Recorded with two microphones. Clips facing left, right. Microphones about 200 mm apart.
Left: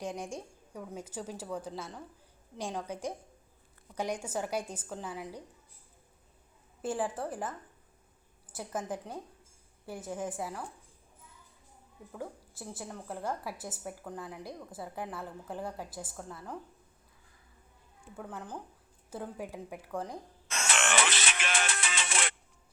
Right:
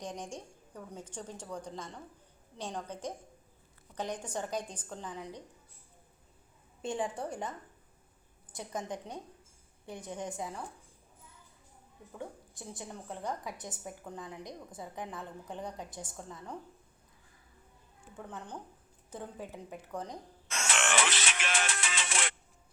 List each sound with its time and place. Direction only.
0.0 s a woman's voice: 10° left (ahead or behind)
6.8 s a woman's voice: 5° left (ahead or behind)
12.1 s a woman's voice: 5° left (ahead or behind)
18.2 s a woman's voice: 5° left (ahead or behind)
20.5 s music: 60° left (ahead or behind)